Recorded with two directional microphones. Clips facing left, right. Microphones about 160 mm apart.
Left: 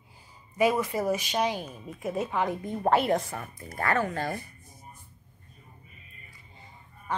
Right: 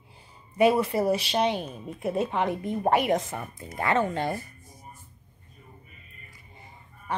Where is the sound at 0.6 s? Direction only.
30° right (ahead or behind).